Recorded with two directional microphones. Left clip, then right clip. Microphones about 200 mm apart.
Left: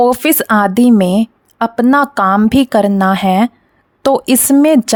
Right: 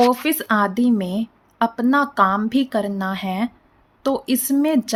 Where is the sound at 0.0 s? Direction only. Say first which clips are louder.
Left 6 dB; 55° left (ahead or behind).